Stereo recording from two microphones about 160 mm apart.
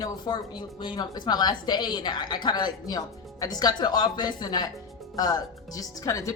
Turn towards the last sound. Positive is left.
turn(degrees=20)  # may be behind; listen again after turning